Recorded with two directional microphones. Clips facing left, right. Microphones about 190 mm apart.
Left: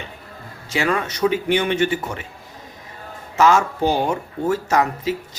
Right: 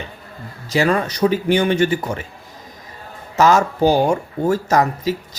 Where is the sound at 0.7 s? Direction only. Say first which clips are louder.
Right 4 dB; 35° right (ahead or behind).